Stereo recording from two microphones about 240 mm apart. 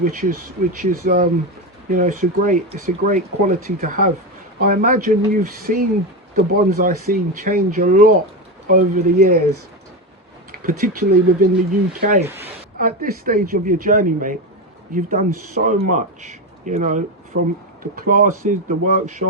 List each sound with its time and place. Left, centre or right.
0.0 s speech: right
10.6 s speech: right
12.2 s speech: centre
12.8 s speech: right